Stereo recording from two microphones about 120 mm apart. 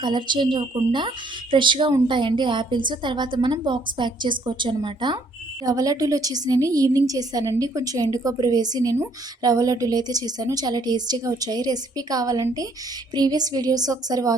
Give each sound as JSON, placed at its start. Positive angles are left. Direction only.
{"t": 0.0, "sound": "a woman's voice", "side_deg": -40}